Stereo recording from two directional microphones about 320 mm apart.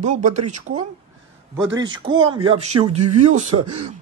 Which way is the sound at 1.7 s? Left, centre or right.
Right.